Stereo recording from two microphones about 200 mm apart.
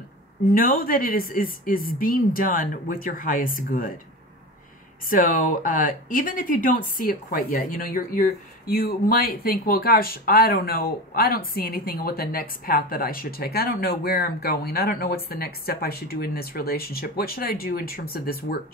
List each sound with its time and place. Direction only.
0.5 s speech: 45° left (ahead or behind)
5.1 s speech: 45° left (ahead or behind)